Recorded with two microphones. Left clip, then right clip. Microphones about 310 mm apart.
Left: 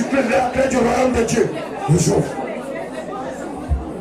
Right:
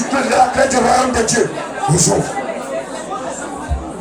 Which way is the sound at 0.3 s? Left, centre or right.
Centre.